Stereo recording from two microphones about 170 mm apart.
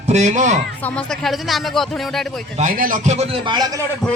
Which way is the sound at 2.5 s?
50° right (ahead or behind).